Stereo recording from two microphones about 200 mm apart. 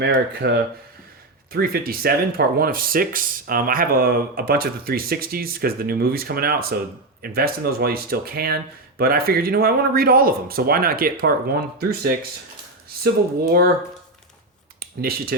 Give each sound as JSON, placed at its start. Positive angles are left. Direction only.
{"t": 0.0, "sound": "speech", "side_deg": -60}
{"t": 1.5, "sound": "speech", "side_deg": -50}
{"t": 13.5, "sound": "speech", "side_deg": -50}
{"t": 14.8, "sound": "speech", "side_deg": -50}